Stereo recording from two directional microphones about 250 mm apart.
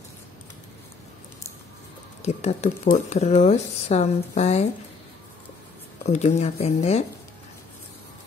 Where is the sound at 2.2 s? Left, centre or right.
Left.